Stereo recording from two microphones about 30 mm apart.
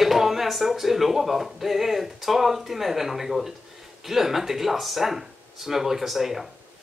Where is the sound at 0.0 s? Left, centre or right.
Centre.